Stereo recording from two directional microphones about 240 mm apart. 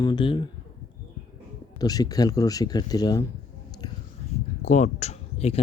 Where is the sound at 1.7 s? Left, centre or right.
Centre.